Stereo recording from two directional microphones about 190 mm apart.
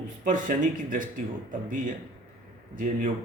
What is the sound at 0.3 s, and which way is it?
A man's voice, 45° right (ahead or behind).